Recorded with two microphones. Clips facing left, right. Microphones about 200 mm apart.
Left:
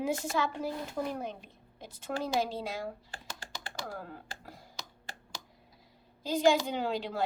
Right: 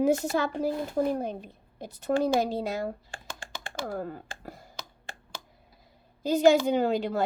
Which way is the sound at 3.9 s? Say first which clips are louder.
Right 8 dB; 50° right (ahead or behind).